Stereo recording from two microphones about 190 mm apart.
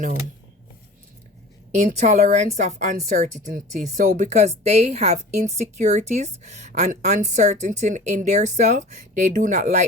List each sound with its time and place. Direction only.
1.7 s a woman's voice: 40° right (ahead or behind)